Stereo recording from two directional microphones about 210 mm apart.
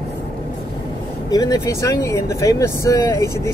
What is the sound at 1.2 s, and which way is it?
Speech, 20° left (ahead or behind).